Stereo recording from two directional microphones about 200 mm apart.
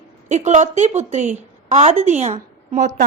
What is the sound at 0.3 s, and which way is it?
A woman's voice, 35° right (ahead or behind).